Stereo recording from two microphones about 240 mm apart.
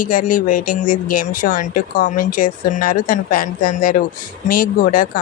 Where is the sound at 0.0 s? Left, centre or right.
Left.